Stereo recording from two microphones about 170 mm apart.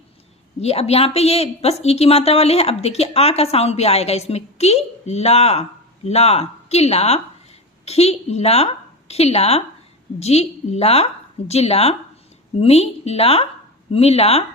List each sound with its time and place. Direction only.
0.6 s a woman's voice: 35° left (ahead or behind)